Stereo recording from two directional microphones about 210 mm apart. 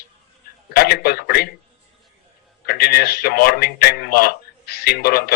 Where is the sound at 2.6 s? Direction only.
45° left (ahead or behind).